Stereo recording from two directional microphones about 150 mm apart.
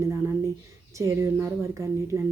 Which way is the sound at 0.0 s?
20° right (ahead or behind).